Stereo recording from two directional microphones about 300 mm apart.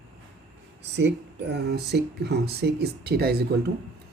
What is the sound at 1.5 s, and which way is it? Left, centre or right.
Speech, right.